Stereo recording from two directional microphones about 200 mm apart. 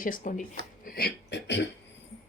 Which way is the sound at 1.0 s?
55° left (ahead or behind).